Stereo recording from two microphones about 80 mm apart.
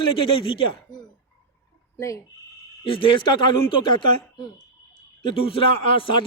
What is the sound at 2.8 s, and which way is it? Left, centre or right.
Speech, left.